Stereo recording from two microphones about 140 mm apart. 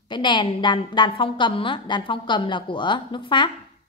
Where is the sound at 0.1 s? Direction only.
35° left (ahead or behind).